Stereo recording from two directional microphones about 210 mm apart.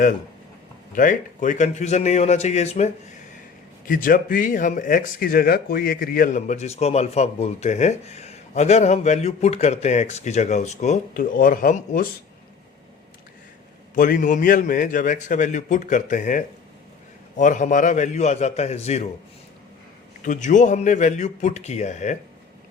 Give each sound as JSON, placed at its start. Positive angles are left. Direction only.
{"t": 0.9, "sound": "speech", "side_deg": 40}
{"t": 13.9, "sound": "speech", "side_deg": 40}
{"t": 20.2, "sound": "speech", "side_deg": 35}